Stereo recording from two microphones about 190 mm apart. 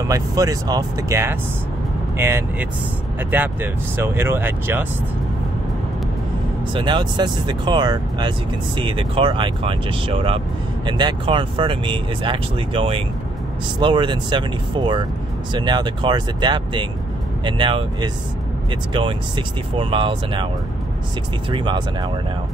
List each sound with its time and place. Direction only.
0.1 s speech: 20° right (ahead or behind)
6.7 s speech: 25° right (ahead or behind)
21.5 s speech: 25° right (ahead or behind)